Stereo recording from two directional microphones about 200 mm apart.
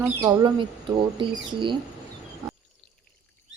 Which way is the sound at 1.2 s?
25° right (ahead or behind).